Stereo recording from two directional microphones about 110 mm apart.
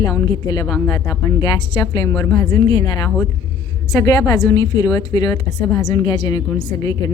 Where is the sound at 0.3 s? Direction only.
35° left (ahead or behind).